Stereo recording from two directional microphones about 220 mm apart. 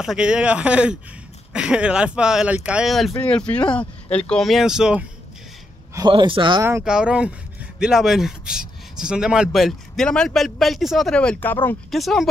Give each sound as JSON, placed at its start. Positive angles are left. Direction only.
{"t": 0.0, "sound": "speech", "side_deg": -5}
{"t": 5.9, "sound": "a man's voice", "side_deg": -20}
{"t": 6.6, "sound": "speech", "side_deg": -5}